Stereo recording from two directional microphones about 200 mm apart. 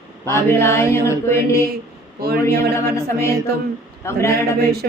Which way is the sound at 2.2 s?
50° right (ahead or behind).